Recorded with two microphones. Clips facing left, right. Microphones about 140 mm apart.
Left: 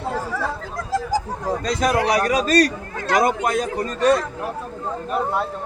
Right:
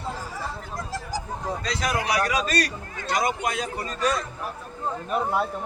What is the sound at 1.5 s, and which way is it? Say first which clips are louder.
A man's voice: left 7 dB; 45° left (ahead or behind).